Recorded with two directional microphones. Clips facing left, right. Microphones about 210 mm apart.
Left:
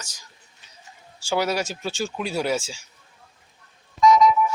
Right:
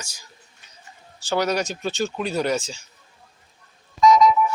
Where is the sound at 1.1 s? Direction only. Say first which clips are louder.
Right 1 dB; 10° left (ahead or behind).